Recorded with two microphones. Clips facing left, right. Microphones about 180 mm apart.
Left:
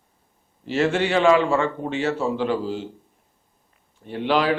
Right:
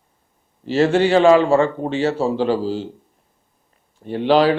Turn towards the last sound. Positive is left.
turn(degrees=-30)  # may be behind; listen again after turning